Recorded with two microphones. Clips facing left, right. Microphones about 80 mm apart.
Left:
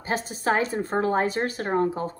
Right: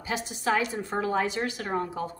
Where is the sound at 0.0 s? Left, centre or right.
Left.